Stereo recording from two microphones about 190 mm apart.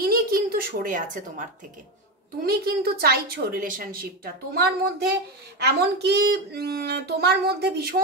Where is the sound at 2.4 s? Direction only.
55° right (ahead or behind).